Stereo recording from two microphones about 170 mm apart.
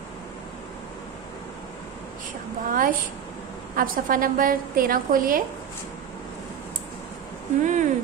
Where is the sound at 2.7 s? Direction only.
55° right (ahead or behind).